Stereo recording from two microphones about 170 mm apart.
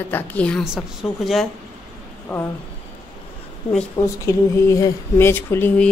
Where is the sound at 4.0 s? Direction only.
15° left (ahead or behind).